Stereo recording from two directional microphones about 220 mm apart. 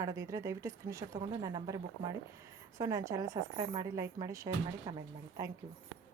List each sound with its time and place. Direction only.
0.0 s a woman's voice: 15° right (ahead or behind)